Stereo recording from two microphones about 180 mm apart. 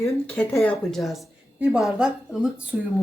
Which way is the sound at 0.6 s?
Centre (ahead or behind).